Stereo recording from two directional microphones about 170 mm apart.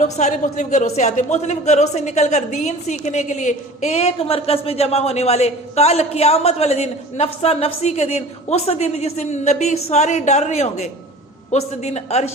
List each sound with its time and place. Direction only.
0.0 s speech: 45° left (ahead or behind)